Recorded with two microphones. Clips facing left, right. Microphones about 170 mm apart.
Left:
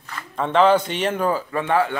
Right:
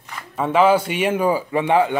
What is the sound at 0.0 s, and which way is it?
Speech, 10° right (ahead or behind).